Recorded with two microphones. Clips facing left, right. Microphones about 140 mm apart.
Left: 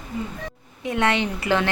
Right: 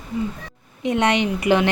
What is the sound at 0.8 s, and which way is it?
Speech, 20° right (ahead or behind).